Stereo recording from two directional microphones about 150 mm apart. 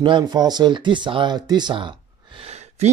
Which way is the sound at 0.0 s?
30° right (ahead or behind).